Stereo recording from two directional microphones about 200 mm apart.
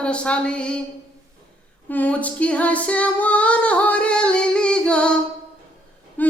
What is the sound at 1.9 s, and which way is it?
Singing, 10° left (ahead or behind).